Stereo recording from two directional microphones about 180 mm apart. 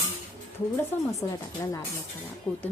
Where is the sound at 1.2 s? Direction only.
15° left (ahead or behind).